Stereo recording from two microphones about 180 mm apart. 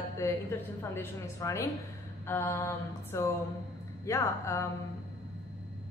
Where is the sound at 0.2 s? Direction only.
15° left (ahead or behind).